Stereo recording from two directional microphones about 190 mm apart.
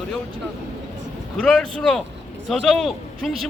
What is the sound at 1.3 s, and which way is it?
A man's voice, 5° left (ahead or behind).